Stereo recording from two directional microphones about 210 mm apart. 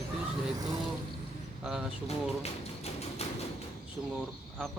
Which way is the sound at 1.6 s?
5° right (ahead or behind).